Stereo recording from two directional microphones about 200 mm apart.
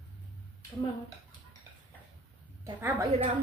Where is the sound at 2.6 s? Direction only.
10° right (ahead or behind).